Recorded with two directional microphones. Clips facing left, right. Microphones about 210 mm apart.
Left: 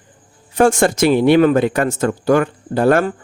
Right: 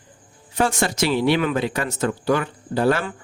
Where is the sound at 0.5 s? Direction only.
50° left (ahead or behind).